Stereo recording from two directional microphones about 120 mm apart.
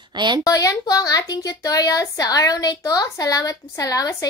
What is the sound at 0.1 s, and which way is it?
Speech, 40° right (ahead or behind).